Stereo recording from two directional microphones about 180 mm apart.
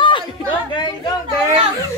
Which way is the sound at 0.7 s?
25° left (ahead or behind).